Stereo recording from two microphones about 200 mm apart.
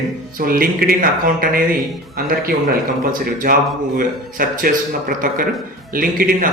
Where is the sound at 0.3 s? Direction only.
45° right (ahead or behind).